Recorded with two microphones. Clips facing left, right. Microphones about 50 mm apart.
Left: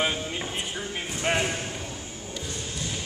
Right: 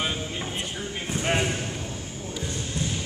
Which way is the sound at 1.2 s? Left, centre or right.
Centre.